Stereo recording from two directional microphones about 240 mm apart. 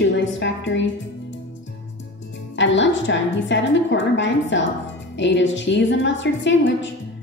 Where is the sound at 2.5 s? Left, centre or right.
Left.